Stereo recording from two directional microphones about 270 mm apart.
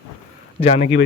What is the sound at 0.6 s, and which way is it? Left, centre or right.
Speech, left.